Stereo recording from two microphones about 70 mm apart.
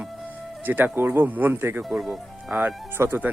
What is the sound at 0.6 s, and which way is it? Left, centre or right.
Speech, right.